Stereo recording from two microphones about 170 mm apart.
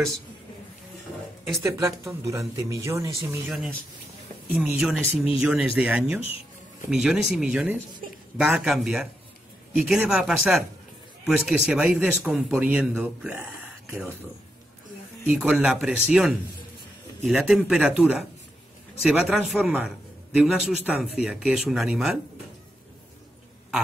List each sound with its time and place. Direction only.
1.6 s speech: 15° right (ahead or behind)
15.2 s speech: 5° right (ahead or behind)